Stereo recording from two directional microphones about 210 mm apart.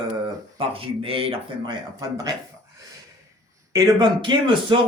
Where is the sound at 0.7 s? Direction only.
25° right (ahead or behind).